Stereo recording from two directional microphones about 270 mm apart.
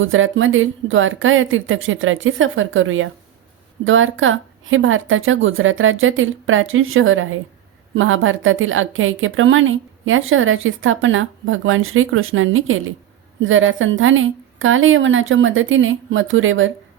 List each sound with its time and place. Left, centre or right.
0.0 s a woman's voice: right